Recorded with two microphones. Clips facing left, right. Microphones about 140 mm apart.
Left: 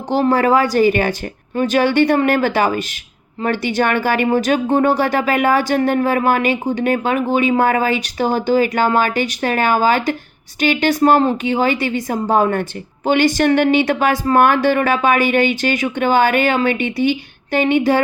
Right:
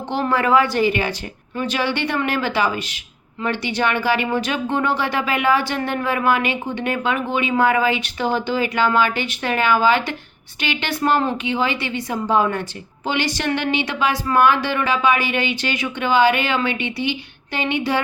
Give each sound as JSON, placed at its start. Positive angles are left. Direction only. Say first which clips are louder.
{"t": 0.1, "sound": "speech", "louder": "left 4 dB", "side_deg": 35}